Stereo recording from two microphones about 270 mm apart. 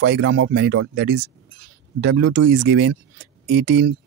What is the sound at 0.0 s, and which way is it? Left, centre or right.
Speech, right.